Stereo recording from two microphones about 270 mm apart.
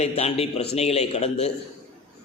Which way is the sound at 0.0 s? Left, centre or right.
Left.